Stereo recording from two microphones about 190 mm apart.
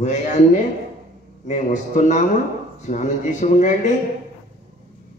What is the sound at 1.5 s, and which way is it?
A man's voice, 40° left (ahead or behind).